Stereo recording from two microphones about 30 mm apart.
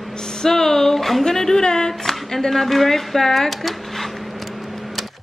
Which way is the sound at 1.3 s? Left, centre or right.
Centre.